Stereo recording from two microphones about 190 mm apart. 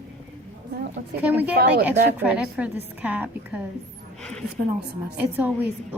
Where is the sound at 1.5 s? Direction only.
55° right (ahead or behind).